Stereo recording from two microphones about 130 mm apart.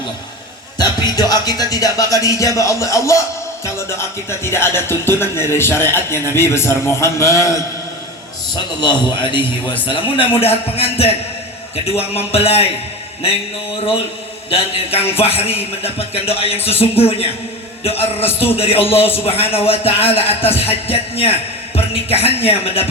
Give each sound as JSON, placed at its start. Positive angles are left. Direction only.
{"t": 0.8, "sound": "speech", "side_deg": 30}
{"t": 8.5, "sound": "a man's voice", "side_deg": 35}
{"t": 14.5, "sound": "speech", "side_deg": 50}